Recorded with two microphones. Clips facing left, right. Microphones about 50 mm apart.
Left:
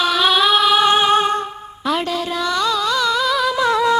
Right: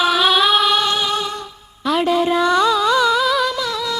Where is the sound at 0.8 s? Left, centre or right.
Left.